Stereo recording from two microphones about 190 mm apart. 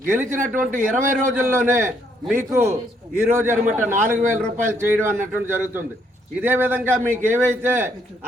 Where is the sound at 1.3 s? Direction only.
10° right (ahead or behind).